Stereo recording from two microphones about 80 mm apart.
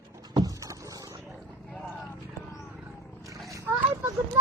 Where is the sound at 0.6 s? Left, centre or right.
Right.